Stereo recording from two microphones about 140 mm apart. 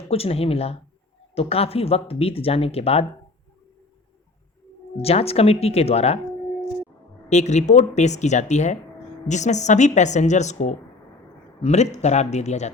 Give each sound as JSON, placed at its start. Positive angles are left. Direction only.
{"t": 0.1, "sound": "speech", "side_deg": 45}
{"t": 5.0, "sound": "speech", "side_deg": 45}
{"t": 7.3, "sound": "speech", "side_deg": 55}